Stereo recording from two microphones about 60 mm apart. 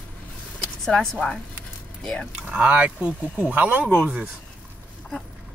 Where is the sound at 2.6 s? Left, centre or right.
Right.